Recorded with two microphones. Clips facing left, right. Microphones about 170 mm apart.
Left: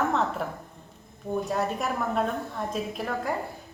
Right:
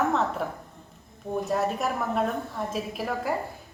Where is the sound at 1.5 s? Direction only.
Centre (ahead or behind).